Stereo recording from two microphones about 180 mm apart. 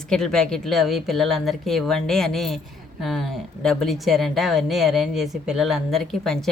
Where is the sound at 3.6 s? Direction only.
Centre (ahead or behind).